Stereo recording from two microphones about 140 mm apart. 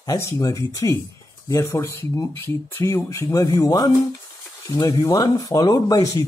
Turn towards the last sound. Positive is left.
turn(degrees=25)  # may be behind; listen again after turning